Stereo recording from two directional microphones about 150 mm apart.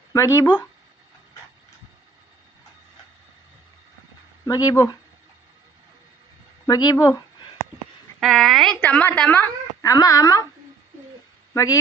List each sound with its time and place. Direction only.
0.1 s speech: 20° left (ahead or behind)
4.4 s speech: 25° left (ahead or behind)
6.7 s speech: 25° left (ahead or behind)
8.2 s a woman's voice: centre (ahead or behind)
9.9 s speech: 25° left (ahead or behind)
11.5 s speech: 25° left (ahead or behind)